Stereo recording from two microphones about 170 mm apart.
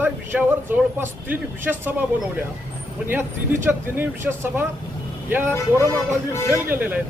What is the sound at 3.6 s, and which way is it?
Speech, 15° right (ahead or behind).